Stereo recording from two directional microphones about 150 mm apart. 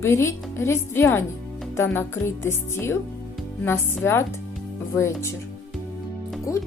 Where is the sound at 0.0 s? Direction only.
20° left (ahead or behind).